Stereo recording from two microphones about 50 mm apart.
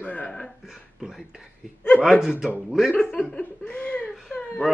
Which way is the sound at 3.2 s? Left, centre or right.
Left.